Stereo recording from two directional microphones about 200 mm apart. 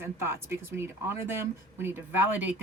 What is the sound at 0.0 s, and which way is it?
A woman's voice, 15° right (ahead or behind).